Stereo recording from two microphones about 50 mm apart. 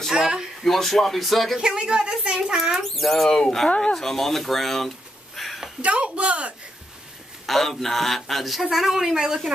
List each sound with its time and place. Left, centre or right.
0.1 s speech: centre
0.6 s a man's voice: centre
1.6 s speech: centre
3.6 s speech: centre
4.0 s speech: centre
5.8 s speech: right
7.4 s a man's voice: centre